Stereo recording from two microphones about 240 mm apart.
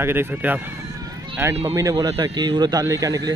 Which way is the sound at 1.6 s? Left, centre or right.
Centre.